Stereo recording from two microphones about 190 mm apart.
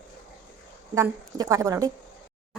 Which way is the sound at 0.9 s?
15° right (ahead or behind).